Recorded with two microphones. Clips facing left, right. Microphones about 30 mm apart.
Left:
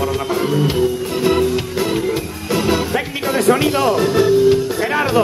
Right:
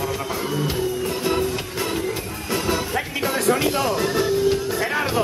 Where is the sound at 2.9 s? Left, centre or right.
Centre.